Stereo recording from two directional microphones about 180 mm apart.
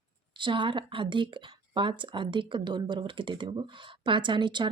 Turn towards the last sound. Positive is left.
turn(degrees=-25)  # may be behind; listen again after turning